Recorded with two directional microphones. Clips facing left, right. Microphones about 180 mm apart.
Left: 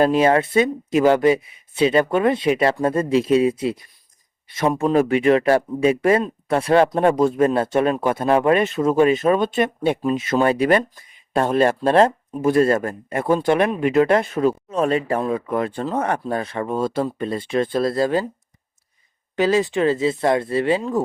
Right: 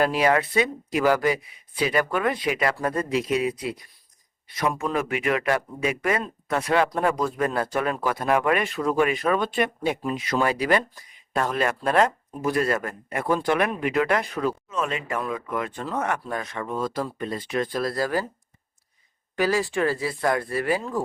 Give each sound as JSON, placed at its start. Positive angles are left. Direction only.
{"t": 0.0, "sound": "speech", "side_deg": 25}
{"t": 19.4, "sound": "speech", "side_deg": 20}